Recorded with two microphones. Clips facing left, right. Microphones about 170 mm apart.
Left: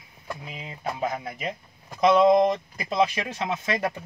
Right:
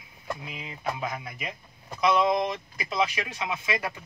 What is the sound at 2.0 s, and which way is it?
Speech, 50° left (ahead or behind).